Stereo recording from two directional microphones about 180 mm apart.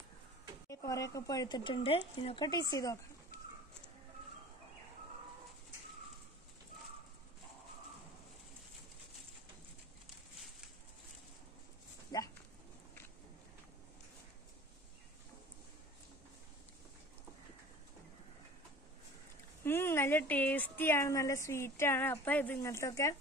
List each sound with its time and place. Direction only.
0.7 s speech: 20° left (ahead or behind)
12.1 s dog: 20° left (ahead or behind)
19.6 s a woman's voice: 15° left (ahead or behind)